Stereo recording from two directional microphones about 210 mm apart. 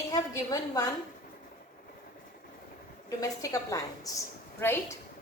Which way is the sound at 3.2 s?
15° left (ahead or behind).